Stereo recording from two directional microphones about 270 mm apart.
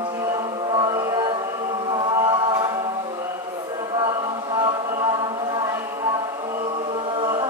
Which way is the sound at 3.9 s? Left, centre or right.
Centre.